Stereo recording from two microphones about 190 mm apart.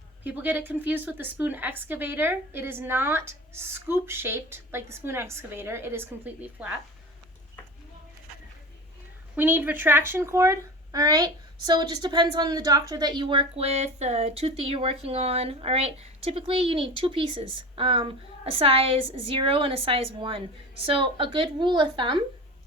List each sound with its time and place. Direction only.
0.3 s a woman's voice: 10° right (ahead or behind)
9.3 s speech: 10° right (ahead or behind)